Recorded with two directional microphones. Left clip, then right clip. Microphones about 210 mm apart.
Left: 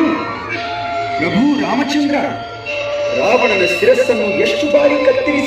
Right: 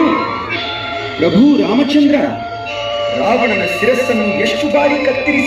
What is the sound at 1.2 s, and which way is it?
Speech, 45° left (ahead or behind).